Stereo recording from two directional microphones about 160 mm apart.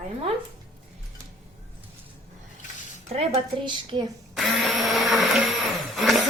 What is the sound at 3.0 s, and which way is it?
A woman's voice, 40° right (ahead or behind).